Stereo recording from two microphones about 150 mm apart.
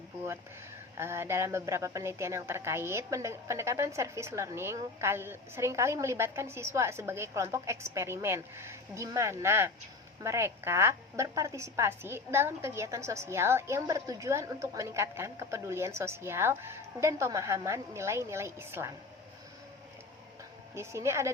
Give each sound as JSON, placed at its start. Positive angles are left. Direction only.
{"t": 0.9, "sound": "a woman's voice", "side_deg": -15}
{"t": 20.7, "sound": "a woman's voice", "side_deg": -20}